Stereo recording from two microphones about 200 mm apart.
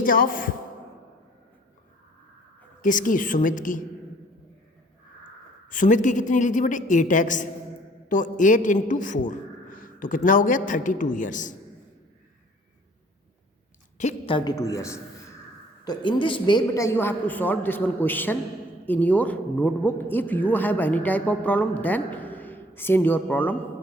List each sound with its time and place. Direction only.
0.0 s speech: 45° left (ahead or behind)
2.8 s a man's voice: 40° left (ahead or behind)
5.6 s a man's voice: 40° left (ahead or behind)
14.0 s a man's voice: 30° left (ahead or behind); by 23.6 s 10° left (ahead or behind)